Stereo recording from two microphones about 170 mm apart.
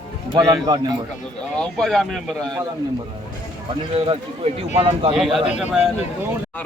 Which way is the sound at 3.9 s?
30° right (ahead or behind).